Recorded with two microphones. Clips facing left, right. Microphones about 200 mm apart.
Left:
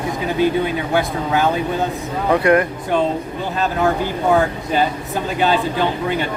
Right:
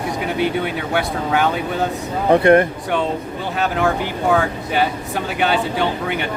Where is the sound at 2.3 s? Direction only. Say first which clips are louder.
Right 3 dB; 30° right (ahead or behind).